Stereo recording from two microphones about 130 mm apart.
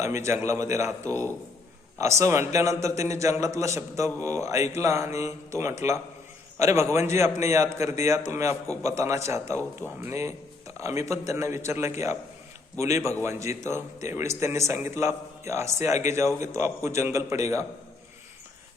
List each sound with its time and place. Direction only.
0.0 s a man's voice: 20° right (ahead or behind)